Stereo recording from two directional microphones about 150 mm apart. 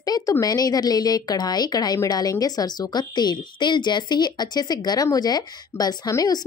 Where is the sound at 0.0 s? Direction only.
25° left (ahead or behind).